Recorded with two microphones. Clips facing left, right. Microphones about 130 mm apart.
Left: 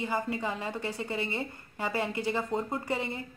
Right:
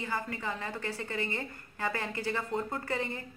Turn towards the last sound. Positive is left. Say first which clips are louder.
# left 2 dB
turn(degrees=15)  # may be behind; listen again after turning